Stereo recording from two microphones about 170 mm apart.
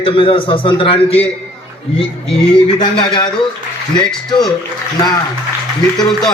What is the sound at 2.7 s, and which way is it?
Speech, 25° left (ahead or behind).